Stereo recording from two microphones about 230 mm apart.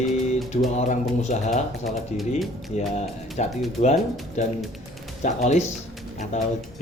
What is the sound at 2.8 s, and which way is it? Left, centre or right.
Speech, left.